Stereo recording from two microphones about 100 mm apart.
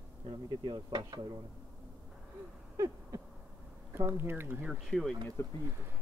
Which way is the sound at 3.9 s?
20° right (ahead or behind).